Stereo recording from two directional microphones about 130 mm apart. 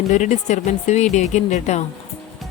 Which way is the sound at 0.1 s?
65° left (ahead or behind).